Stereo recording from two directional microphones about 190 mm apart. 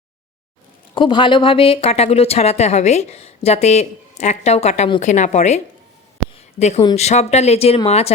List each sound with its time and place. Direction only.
0.9 s speech: 25° left (ahead or behind)
6.6 s speech: 35° left (ahead or behind)